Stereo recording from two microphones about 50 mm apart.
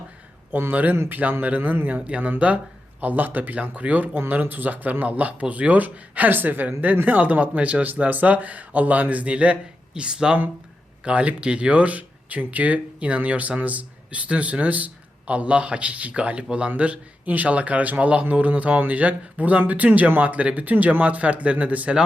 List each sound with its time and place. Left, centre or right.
0.5 s speech: right
2.0 s a man's voice: right
3.0 s a man's voice: right